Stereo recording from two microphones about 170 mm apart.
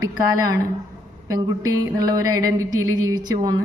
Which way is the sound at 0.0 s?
20° right (ahead or behind).